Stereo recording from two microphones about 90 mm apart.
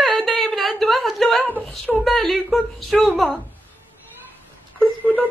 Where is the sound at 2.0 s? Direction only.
Centre (ahead or behind).